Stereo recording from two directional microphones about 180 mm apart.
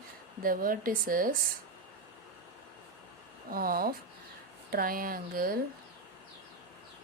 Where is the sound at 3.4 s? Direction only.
55° right (ahead or behind).